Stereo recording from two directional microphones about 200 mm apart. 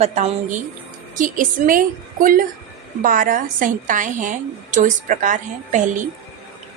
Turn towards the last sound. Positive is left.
turn(degrees=-40)  # may be behind; listen again after turning